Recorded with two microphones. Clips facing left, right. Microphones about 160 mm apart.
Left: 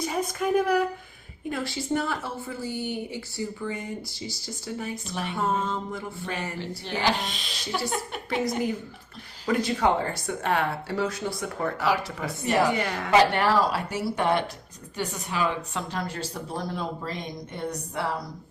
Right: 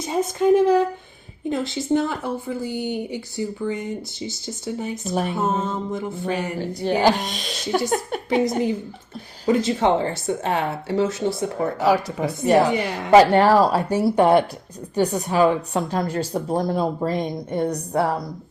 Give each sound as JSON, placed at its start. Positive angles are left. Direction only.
{"t": 0.0, "sound": "a woman's voice", "side_deg": -25}
{"t": 5.0, "sound": "a woman's voice", "side_deg": -45}
{"t": 5.4, "sound": "a woman's voice", "side_deg": -20}
{"t": 7.0, "sound": "a woman's voice", "side_deg": -40}
{"t": 8.3, "sound": "a woman's voice", "side_deg": -20}
{"t": 13.3, "sound": "a woman's voice", "side_deg": -40}